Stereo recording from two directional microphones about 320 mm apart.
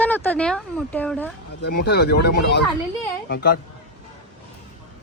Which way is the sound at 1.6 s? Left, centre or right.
Left.